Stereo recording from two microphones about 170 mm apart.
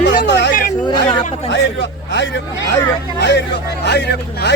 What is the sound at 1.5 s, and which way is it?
Speech, 90° left.